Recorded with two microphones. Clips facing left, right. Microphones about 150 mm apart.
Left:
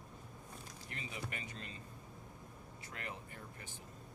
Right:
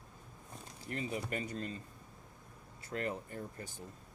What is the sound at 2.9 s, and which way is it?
Speech, 40° right (ahead or behind).